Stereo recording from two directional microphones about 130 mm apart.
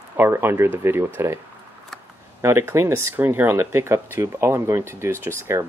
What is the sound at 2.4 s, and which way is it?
Speech, 20° right (ahead or behind).